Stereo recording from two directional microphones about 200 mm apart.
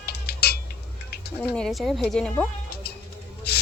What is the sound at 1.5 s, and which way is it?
Speech, centre (ahead or behind).